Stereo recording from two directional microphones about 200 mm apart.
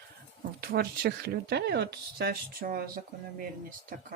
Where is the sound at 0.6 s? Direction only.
50° right (ahead or behind).